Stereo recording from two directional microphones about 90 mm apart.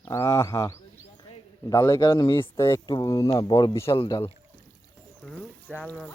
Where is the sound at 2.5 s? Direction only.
30° left (ahead or behind).